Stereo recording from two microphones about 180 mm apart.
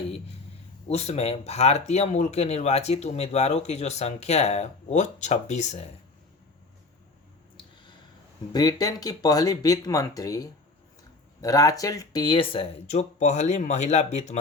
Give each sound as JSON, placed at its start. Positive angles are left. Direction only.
{"t": 0.9, "sound": "speech", "side_deg": 35}
{"t": 8.5, "sound": "speech", "side_deg": 20}